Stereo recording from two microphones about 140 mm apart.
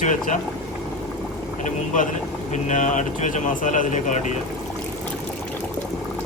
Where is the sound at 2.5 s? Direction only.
60° left (ahead or behind).